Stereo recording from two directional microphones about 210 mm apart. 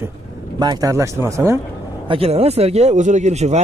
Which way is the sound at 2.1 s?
30° right (ahead or behind).